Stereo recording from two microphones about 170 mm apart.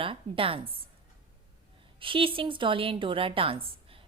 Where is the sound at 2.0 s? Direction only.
30° right (ahead or behind).